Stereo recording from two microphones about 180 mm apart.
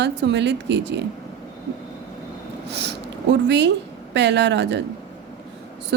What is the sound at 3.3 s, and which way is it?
Speech, 75° right (ahead or behind).